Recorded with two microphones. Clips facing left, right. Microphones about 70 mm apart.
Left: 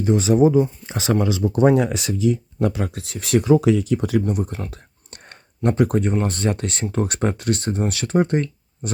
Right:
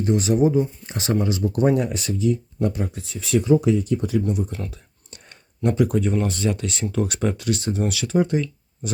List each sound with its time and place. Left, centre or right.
0.6 s speech: left
4.7 s a sound: left
6.2 s speech: left